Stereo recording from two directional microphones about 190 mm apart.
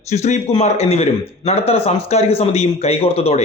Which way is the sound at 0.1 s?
35° left (ahead or behind).